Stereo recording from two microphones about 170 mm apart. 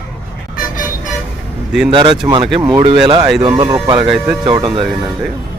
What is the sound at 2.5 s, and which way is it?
Speech, 5° right (ahead or behind).